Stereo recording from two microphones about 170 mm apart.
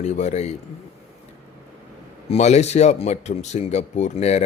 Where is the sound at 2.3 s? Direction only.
40° left (ahead or behind).